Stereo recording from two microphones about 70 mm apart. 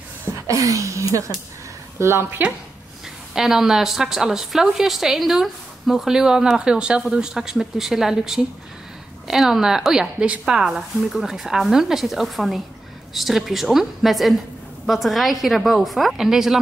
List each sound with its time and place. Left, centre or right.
0.5 s speech: right
3.3 s a woman's voice: centre